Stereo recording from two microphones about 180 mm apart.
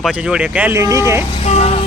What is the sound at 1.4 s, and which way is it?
Vehicle, 35° left (ahead or behind).